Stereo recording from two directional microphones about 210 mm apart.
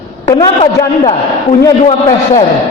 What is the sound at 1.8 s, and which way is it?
Speech, 30° left (ahead or behind).